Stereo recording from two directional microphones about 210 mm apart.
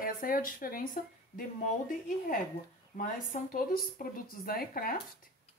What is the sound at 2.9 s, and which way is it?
Speech, 40° left (ahead or behind).